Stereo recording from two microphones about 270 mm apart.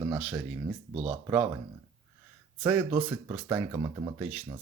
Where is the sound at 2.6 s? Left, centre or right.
Centre.